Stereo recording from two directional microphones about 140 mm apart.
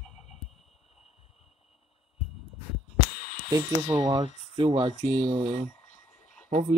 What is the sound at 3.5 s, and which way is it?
Speech, 25° right (ahead or behind).